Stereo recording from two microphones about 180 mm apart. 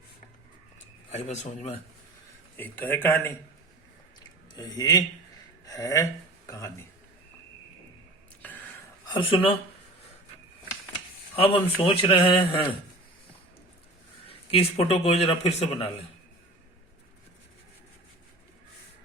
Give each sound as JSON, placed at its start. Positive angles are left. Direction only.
{"t": 1.1, "sound": "a man's voice", "side_deg": 40}
{"t": 2.6, "sound": "speech", "side_deg": 10}
{"t": 4.5, "sound": "speech", "side_deg": 20}
{"t": 8.4, "sound": "a sound", "side_deg": 10}
{"t": 9.0, "sound": "speech", "side_deg": 30}
{"t": 11.3, "sound": "speech", "side_deg": 30}
{"t": 14.3, "sound": "a man's voice", "side_deg": 35}